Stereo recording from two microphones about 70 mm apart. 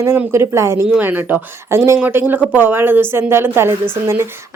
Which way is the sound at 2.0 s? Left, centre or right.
Right.